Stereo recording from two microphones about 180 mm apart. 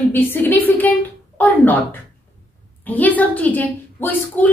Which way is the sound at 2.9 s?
10° left (ahead or behind).